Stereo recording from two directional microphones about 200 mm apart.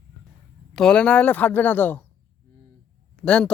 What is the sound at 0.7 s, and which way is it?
Speech, 5° left (ahead or behind).